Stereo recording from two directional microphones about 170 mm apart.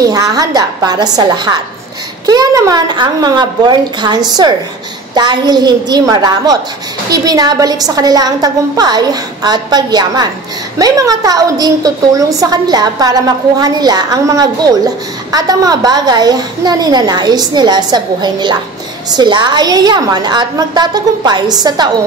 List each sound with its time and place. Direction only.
0.0 s a woman's voice: 20° right (ahead or behind)